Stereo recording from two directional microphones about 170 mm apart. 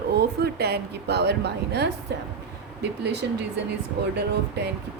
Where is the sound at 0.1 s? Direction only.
70° right (ahead or behind).